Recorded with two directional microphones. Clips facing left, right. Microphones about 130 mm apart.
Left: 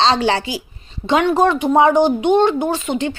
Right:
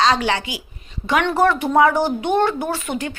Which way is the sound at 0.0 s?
30° left (ahead or behind).